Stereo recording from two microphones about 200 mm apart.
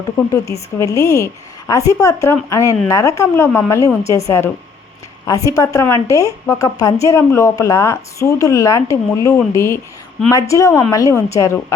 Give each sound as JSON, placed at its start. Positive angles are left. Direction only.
{"t": 0.3, "sound": "a woman's voice", "side_deg": 15}